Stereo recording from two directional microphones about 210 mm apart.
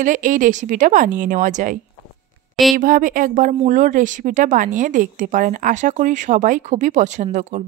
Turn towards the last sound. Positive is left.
turn(degrees=-35)  # may be behind; listen again after turning